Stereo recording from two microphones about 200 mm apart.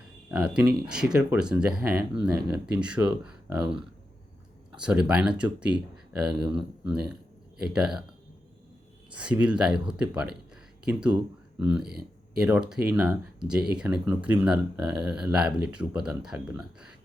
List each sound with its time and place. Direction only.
0.3 s speech: 5° right (ahead or behind)
9.1 s speech: 5° right (ahead or behind)
11.6 s speech: 5° right (ahead or behind)
11.9 s a sound: 50° right (ahead or behind)
12.4 s speech: 5° right (ahead or behind)